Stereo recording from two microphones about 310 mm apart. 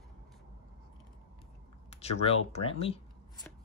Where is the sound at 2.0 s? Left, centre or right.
Centre.